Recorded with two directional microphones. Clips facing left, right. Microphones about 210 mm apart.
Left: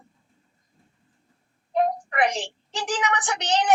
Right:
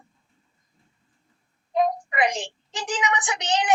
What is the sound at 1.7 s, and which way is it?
A woman's voice, 15° right (ahead or behind).